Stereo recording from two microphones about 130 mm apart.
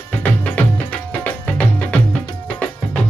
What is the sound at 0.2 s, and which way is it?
Music, 10° left (ahead or behind).